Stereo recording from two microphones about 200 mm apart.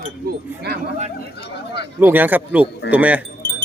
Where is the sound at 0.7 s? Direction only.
55° right (ahead or behind).